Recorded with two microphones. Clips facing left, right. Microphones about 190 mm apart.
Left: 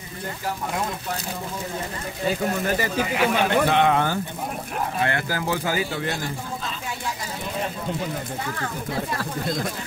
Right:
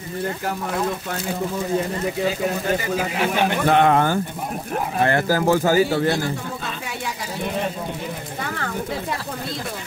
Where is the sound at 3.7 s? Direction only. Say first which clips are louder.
Right 3 dB; 45° right (ahead or behind).